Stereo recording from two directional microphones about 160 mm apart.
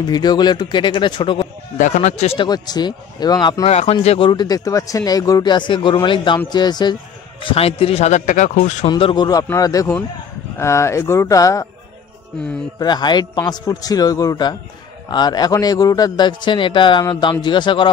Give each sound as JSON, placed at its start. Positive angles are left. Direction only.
{"t": 0.0, "sound": "speech", "side_deg": 25}
{"t": 1.8, "sound": "a man's voice", "side_deg": 50}
{"t": 2.3, "sound": "speech", "side_deg": 25}
{"t": 3.6, "sound": "speech", "side_deg": 40}
{"t": 7.4, "sound": "speech", "side_deg": 35}
{"t": 8.8, "sound": "speech", "side_deg": 35}
{"t": 12.7, "sound": "speech", "side_deg": 30}